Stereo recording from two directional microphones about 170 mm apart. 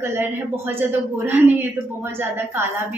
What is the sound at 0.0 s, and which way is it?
A woman's voice, 15° right (ahead or behind).